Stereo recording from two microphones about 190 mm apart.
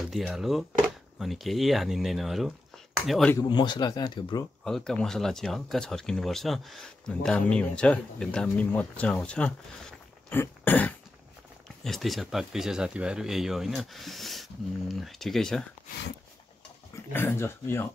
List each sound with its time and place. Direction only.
0.1 s speech: centre (ahead or behind)
3.3 s speech: 25° left (ahead or behind)
4.6 s speech: centre (ahead or behind)
17.1 s speech: 10° left (ahead or behind)